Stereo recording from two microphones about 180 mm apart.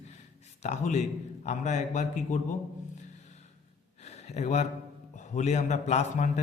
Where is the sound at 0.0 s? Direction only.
40° left (ahead or behind).